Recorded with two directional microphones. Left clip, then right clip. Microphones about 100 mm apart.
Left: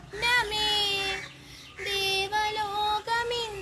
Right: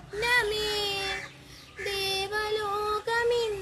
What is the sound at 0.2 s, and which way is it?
Child singing, 45° right (ahead or behind).